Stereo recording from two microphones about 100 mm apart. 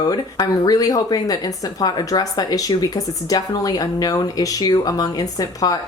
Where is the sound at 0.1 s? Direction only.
40° left (ahead or behind).